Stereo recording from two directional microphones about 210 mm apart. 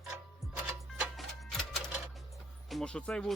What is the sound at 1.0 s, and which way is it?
Printer, centre (ahead or behind).